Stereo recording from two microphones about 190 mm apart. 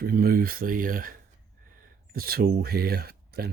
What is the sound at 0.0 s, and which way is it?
Speech, 50° right (ahead or behind).